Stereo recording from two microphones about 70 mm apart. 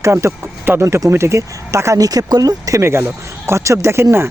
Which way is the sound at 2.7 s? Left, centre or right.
Right.